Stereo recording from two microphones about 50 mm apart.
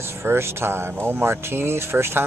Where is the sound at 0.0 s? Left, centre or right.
Right.